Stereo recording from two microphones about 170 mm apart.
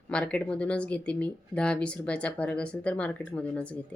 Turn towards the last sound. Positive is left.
turn(degrees=5)  # may be behind; listen again after turning